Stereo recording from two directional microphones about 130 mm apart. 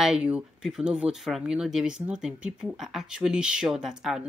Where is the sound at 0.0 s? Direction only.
5° right (ahead or behind).